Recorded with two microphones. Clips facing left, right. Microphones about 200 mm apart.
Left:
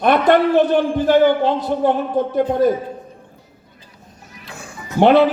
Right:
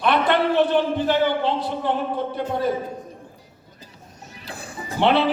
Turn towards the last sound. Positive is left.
turn(degrees=45)  # may be behind; listen again after turning